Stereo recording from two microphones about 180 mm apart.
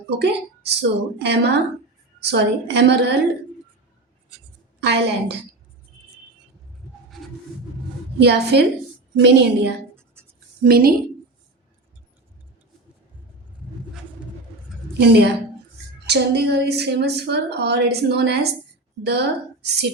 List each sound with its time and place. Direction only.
0.2 s a woman's voice: 70° right (ahead or behind)
4.8 s a woman's voice: 65° right (ahead or behind)
8.2 s a woman's voice: 70° right (ahead or behind)
10.6 s a woman's voice: 55° right (ahead or behind)
14.9 s a woman's voice: 65° right (ahead or behind)